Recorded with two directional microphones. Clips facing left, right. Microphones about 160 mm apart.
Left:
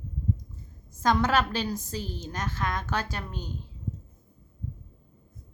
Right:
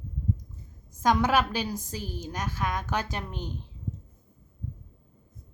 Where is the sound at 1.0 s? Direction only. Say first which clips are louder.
Right 1 dB; 10° right (ahead or behind).